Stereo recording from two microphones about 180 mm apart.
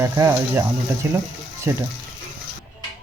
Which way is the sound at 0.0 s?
15° right (ahead or behind).